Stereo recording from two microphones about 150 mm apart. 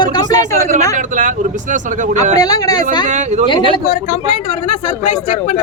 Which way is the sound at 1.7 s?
55° right (ahead or behind).